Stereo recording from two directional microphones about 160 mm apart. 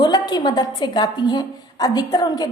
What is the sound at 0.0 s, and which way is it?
A woman's voice, 25° left (ahead or behind).